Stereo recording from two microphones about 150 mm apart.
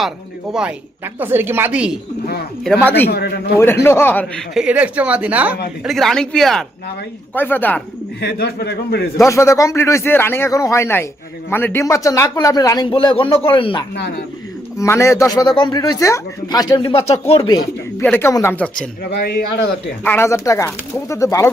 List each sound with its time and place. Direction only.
0.5 s a woman's voice: 10° right (ahead or behind)
2.2 s speech: 90° left
2.8 s speech: 15° left (ahead or behind)
3.1 s a man's voice: 90° left
3.6 s speech: 15° left (ahead or behind)
4.5 s a woman's voice: 10° right (ahead or behind)
5.8 s speech: centre (ahead or behind)
7.3 s speech: 15° left (ahead or behind)
8.3 s a man's voice: 90° left
9.1 s speech: 20° left (ahead or behind); by 13.8 s 35° left (ahead or behind)
14.8 s speech: 20° left (ahead or behind); by 17.5 s 40° left (ahead or behind)
18.0 s speech: 15° left (ahead or behind)
20.1 s speech: 15° left (ahead or behind)